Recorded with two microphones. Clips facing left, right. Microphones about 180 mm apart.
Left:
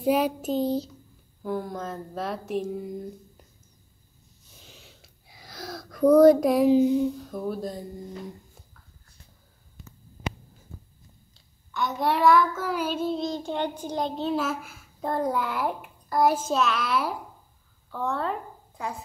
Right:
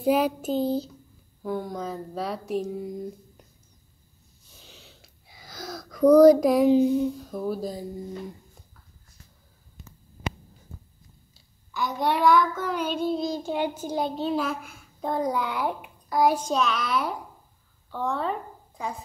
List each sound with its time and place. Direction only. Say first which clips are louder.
0.0 s child singing: right 1 dB; centre (ahead or behind)
4.6 s a sound: right 1 dB; centre (ahead or behind)
11.3 s child singing: left 1 dB; centre (ahead or behind)
17.9 s speech: right 1 dB; centre (ahead or behind)